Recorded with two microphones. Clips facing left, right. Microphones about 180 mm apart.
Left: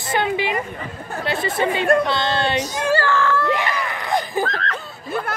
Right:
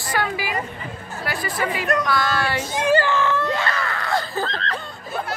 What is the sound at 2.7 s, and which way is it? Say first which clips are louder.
Baby cry: right 1 dB; 15° right (ahead or behind).